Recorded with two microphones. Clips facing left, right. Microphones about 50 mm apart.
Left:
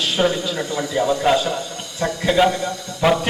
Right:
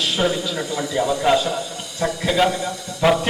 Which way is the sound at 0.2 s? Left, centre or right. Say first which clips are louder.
Left 3 dB; centre.